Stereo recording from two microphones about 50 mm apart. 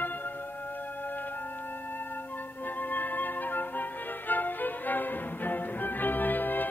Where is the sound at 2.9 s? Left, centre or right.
Left.